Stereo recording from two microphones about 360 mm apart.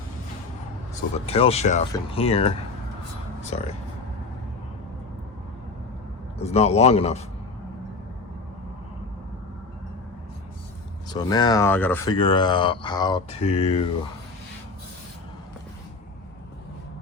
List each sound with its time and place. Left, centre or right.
1.1 s speech: centre
3.5 s speech: centre
6.4 s speech: centre
11.1 s speech: centre